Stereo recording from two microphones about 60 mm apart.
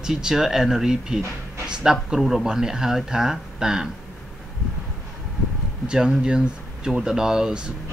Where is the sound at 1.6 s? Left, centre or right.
Centre.